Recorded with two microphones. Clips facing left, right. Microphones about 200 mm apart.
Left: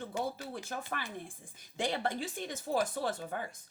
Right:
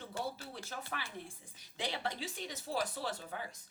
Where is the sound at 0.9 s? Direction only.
50° left (ahead or behind).